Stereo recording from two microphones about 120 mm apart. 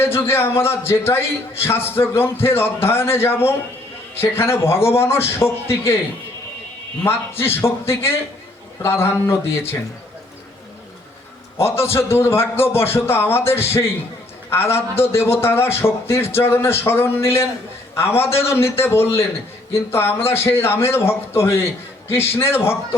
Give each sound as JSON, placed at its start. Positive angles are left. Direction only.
{"t": 0.0, "sound": "a man's voice", "side_deg": 20}
{"t": 7.0, "sound": "a man's voice", "side_deg": 20}
{"t": 11.5, "sound": "a man's voice", "side_deg": 20}